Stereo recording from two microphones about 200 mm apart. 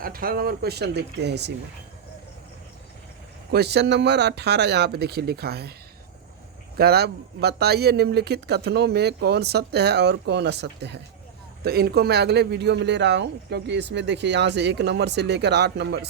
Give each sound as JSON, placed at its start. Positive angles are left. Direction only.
{"t": 0.0, "sound": "speech", "side_deg": -45}
{"t": 3.5, "sound": "speech", "side_deg": -55}
{"t": 6.7, "sound": "speech", "side_deg": -50}